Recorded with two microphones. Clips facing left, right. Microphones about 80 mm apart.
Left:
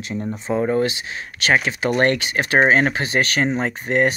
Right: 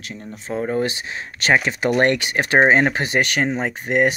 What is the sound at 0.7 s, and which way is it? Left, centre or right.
Speech, right.